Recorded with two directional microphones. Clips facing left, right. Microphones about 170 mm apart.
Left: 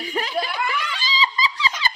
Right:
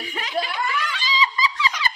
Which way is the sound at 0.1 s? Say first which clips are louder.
Left 2 dB; 35° left (ahead or behind).